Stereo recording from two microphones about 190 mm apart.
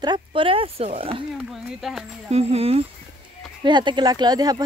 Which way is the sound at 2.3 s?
30° right (ahead or behind).